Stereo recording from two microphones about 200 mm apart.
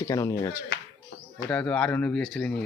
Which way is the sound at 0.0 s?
15° left (ahead or behind).